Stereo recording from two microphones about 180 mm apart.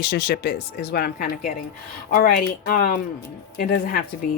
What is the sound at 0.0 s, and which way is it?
Speech, 60° left (ahead or behind).